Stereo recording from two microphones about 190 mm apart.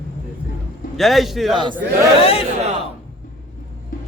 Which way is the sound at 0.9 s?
Centre (ahead or behind).